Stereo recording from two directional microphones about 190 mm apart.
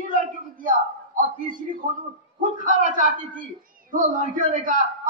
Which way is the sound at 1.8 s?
45° right (ahead or behind).